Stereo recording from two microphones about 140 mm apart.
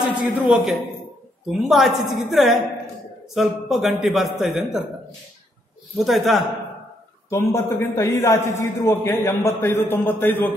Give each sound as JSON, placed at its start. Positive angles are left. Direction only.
{"t": 0.1, "sound": "a man's voice", "side_deg": -10}
{"t": 5.9, "sound": "a man's voice", "side_deg": 0}
{"t": 7.2, "sound": "a man's voice", "side_deg": 20}